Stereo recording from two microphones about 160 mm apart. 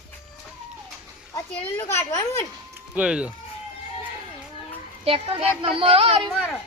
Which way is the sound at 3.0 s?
5° right (ahead or behind).